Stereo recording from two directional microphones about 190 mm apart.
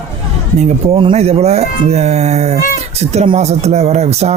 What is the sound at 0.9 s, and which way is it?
Speech, 30° right (ahead or behind).